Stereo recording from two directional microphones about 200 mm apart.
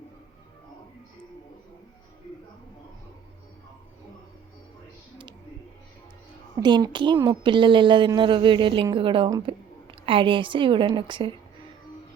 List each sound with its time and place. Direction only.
6.6 s speech: 20° right (ahead or behind)